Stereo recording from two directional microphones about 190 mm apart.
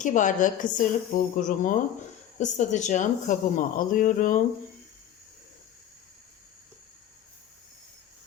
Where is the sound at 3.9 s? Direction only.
45° left (ahead or behind).